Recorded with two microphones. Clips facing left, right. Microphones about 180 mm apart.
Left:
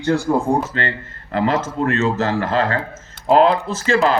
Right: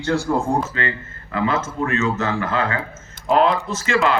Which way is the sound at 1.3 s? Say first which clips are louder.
Left 3 dB; 35° left (ahead or behind).